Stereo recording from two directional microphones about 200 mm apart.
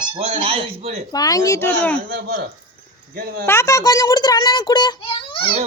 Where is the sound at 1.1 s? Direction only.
20° left (ahead or behind).